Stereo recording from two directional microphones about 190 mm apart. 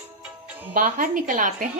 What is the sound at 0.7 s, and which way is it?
Speech, 45° right (ahead or behind).